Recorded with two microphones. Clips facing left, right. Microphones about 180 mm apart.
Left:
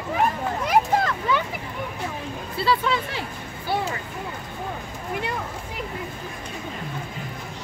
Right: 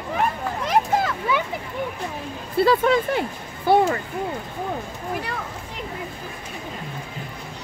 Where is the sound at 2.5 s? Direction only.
50° right (ahead or behind).